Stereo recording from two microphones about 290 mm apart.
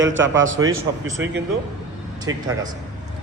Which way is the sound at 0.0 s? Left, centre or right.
Right.